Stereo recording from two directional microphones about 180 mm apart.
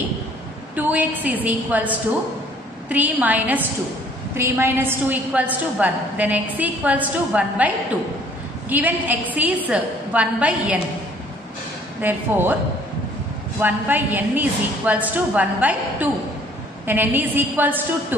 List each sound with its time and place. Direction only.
0.7 s a woman's voice: 10° right (ahead or behind)
12.0 s a woman's voice: 10° right (ahead or behind)
13.6 s a woman's voice: 10° right (ahead or behind)